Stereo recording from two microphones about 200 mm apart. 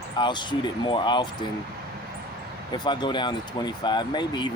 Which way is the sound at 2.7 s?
20° left (ahead or behind).